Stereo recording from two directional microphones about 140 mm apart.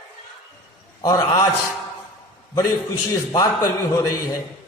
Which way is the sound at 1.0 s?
25° left (ahead or behind).